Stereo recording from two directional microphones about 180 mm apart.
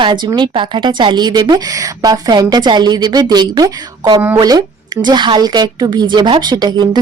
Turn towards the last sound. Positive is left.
turn(degrees=-25)  # may be behind; listen again after turning